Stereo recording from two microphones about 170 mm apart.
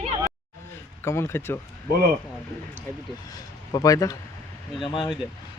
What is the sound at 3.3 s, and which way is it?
A man's voice, 20° left (ahead or behind).